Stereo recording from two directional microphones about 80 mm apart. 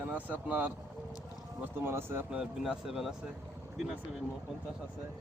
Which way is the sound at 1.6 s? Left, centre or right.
Right.